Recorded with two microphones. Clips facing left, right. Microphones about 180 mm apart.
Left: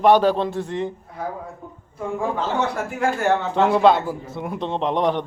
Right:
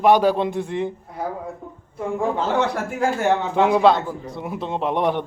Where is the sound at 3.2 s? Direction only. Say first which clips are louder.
Even; 15° right (ahead or behind).